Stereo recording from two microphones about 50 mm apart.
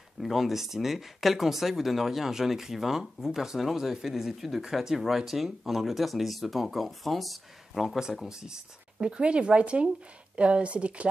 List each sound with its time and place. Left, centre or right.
0.2 s speech: centre
8.3 s speech: centre